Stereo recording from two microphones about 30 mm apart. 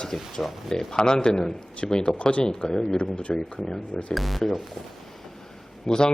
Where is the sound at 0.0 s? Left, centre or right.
Left.